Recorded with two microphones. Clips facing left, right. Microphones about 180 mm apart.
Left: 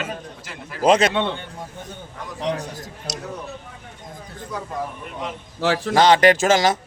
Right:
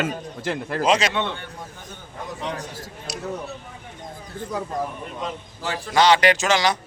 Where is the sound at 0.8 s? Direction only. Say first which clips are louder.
Left 5 dB; 55° left (ahead or behind).